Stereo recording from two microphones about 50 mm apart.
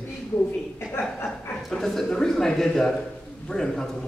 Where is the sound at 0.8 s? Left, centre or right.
Left.